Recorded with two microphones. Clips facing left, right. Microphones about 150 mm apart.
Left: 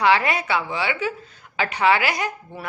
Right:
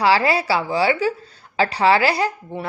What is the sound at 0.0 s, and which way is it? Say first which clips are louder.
A woman's voice: right 2 dB; 30° right (ahead or behind).